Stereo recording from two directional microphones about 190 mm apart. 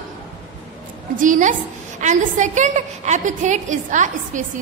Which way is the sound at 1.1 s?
45° right (ahead or behind).